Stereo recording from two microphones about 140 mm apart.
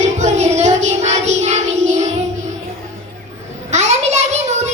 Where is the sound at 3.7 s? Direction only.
55° right (ahead or behind).